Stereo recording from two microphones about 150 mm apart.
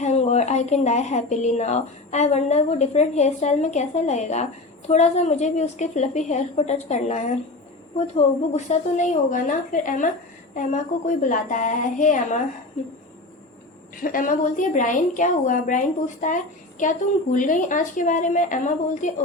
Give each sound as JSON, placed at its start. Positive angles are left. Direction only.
{"t": 0.0, "sound": "a woman's voice", "side_deg": 45}
{"t": 13.9, "sound": "a woman's voice", "side_deg": 65}